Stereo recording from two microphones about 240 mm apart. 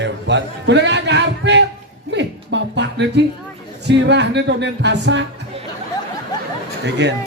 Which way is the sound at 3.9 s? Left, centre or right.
Right.